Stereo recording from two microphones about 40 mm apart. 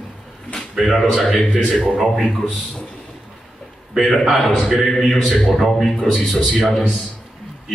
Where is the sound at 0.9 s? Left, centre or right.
Centre.